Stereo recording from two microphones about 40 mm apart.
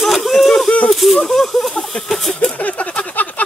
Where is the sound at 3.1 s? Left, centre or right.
Left.